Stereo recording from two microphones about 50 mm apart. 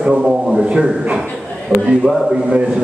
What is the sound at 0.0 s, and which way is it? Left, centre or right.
Speech, centre.